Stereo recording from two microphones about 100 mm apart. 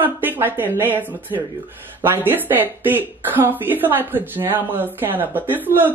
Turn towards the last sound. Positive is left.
turn(degrees=-20)  # may be behind; listen again after turning